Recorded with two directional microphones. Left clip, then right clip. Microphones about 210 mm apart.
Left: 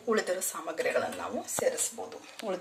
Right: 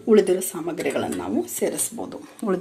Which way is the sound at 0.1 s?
10° right (ahead or behind).